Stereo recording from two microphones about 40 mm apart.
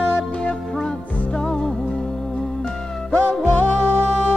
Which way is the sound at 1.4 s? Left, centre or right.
Left.